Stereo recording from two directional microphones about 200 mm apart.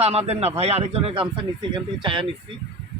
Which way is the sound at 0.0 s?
30° right (ahead or behind).